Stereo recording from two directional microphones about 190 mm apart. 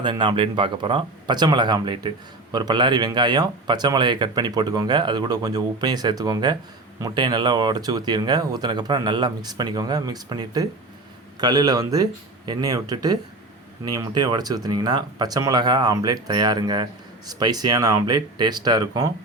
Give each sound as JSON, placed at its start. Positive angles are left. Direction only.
{"t": 0.0, "sound": "speech", "side_deg": -25}